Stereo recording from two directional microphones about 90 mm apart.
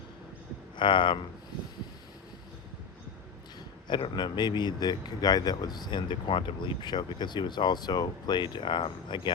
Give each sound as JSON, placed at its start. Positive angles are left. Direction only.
{"t": 0.8, "sound": "speech", "side_deg": 65}
{"t": 3.8, "sound": "speech", "side_deg": 55}